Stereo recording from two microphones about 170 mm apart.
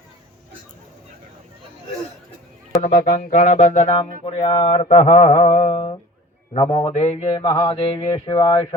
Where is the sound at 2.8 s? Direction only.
50° left (ahead or behind).